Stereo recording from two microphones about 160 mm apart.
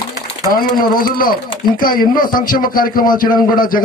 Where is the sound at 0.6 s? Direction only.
65° left (ahead or behind).